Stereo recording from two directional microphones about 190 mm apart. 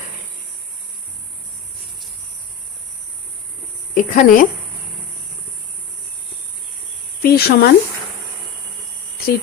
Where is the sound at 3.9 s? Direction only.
45° left (ahead or behind).